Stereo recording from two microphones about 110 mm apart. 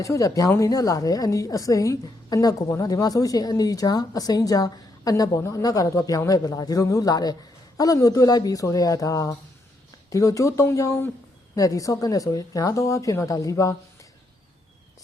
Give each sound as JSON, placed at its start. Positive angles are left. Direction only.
{"t": 0.0, "sound": "a woman's voice", "side_deg": 30}